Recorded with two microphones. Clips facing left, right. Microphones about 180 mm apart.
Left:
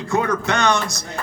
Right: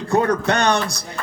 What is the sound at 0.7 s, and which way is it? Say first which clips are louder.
Speech: right 1 dB; 60° right (ahead or behind).